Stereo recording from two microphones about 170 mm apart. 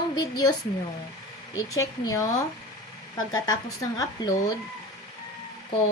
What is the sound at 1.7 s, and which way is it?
Speech, 20° left (ahead or behind).